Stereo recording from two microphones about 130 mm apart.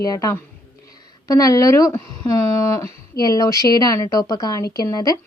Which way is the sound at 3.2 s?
30° left (ahead or behind).